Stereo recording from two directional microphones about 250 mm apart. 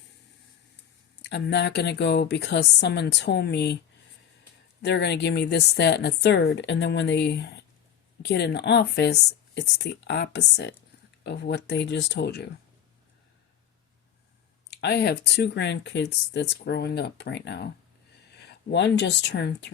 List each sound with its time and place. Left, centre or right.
1.2 s speech: left
4.8 s a woman's voice: left
14.7 s speech: left